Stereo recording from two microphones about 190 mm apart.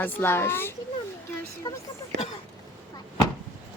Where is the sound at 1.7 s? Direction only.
20° left (ahead or behind).